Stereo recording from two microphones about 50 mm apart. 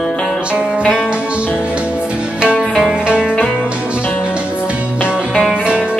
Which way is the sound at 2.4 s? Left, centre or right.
Right.